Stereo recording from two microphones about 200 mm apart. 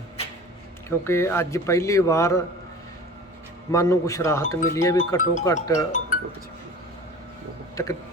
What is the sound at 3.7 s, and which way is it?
Speech, 15° left (ahead or behind).